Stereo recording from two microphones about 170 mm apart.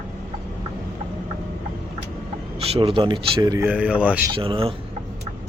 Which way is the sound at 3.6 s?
10° right (ahead or behind).